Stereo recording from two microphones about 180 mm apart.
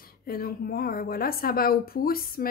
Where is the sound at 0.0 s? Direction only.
55° left (ahead or behind).